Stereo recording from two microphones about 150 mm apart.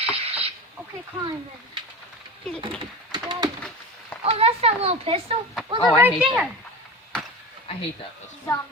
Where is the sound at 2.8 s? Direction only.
30° right (ahead or behind).